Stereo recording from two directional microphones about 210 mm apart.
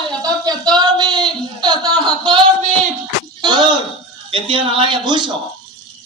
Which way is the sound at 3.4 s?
20° right (ahead or behind).